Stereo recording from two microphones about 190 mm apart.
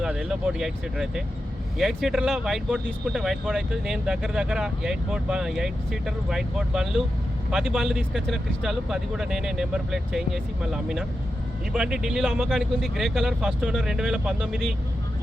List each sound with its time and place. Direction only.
0.0 s speech: 5° right (ahead or behind)